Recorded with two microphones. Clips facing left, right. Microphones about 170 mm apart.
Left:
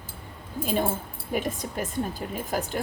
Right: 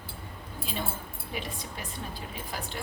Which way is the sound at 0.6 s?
50° left (ahead or behind).